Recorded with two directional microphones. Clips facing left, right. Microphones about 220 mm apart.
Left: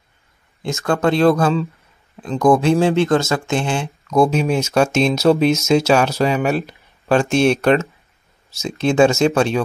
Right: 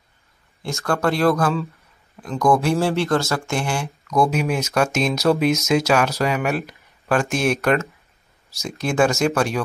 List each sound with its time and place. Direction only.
0.8 s speech: 20° left (ahead or behind)